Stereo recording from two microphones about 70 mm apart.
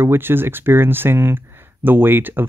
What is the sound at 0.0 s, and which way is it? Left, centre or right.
Speech, right.